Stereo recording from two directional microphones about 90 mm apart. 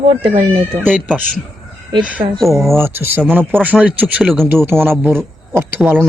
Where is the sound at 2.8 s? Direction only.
25° right (ahead or behind).